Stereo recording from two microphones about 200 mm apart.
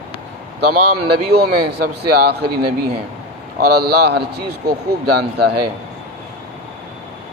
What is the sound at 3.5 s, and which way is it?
A man's voice, 50° right (ahead or behind).